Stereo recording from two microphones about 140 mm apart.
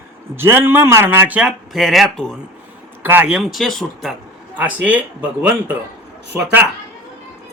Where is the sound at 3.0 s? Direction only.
15° right (ahead or behind).